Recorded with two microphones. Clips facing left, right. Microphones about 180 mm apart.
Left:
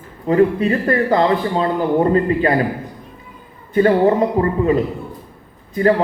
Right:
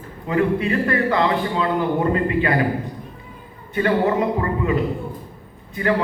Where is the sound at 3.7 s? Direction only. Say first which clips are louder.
Left 5 dB; 35° left (ahead or behind).